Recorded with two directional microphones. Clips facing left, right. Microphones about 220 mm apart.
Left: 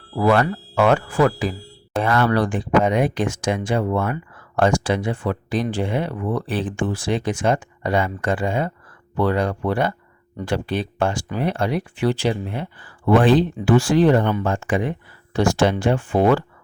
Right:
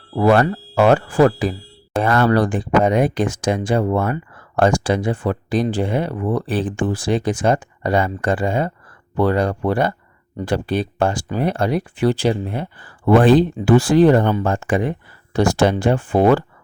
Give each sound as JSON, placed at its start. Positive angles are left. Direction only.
{"t": 0.2, "sound": "speech", "side_deg": -35}